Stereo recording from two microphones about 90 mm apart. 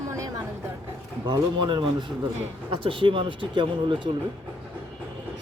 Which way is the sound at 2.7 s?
75° right (ahead or behind).